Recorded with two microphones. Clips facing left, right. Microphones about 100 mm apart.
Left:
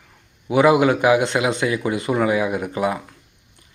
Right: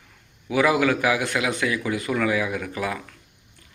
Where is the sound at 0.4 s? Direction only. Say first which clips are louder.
Left 5 dB; 25° left (ahead or behind).